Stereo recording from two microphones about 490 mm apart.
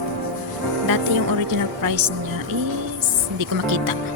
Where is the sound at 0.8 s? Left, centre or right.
Right.